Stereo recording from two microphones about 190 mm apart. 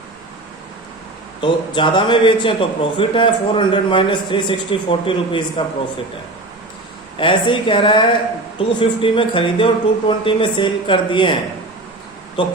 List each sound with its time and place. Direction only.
1.4 s a man's voice: 25° left (ahead or behind)
7.2 s a man's voice: 25° left (ahead or behind)
12.4 s a man's voice: 25° left (ahead or behind)